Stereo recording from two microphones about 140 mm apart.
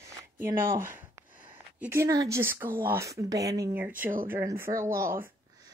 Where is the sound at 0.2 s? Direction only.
20° right (ahead or behind).